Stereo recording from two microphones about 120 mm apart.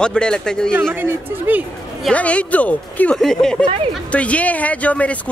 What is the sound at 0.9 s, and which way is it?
Speech, 15° right (ahead or behind).